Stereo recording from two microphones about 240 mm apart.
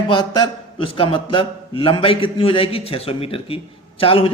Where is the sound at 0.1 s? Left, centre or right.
Centre.